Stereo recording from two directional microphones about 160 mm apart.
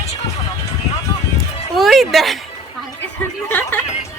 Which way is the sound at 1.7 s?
Centre (ahead or behind).